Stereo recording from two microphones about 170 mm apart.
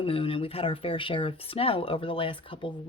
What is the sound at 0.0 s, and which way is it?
Speech, 30° left (ahead or behind).